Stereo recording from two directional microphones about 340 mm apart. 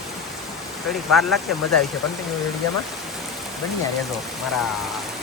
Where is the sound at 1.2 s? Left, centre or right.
Centre.